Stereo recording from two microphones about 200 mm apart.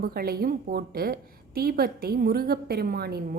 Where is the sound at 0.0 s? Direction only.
50° right (ahead or behind).